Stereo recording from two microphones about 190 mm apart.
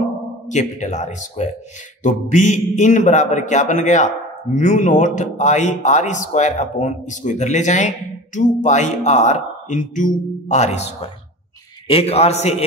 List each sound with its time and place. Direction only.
0.5 s speech: 40° left (ahead or behind)